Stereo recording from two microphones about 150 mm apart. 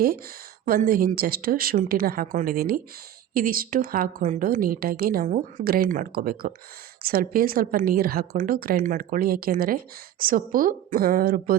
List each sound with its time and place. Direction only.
0.6 s a woman's voice: 70° right (ahead or behind)